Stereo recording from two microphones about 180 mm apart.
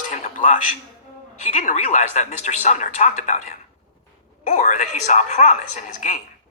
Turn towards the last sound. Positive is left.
turn(degrees=45)  # may be behind; listen again after turning